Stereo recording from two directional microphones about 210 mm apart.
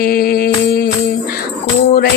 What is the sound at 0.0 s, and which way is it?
Mantra, 45° left (ahead or behind).